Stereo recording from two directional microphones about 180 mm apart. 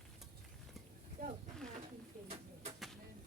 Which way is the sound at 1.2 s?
55° right (ahead or behind).